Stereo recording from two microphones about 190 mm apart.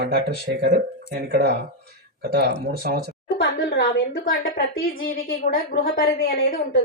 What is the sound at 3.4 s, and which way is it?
A woman's voice, 60° left (ahead or behind).